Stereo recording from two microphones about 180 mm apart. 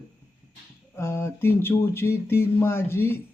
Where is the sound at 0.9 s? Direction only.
15° left (ahead or behind).